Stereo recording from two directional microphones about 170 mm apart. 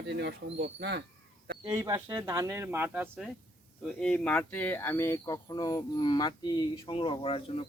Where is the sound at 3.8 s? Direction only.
5° left (ahead or behind).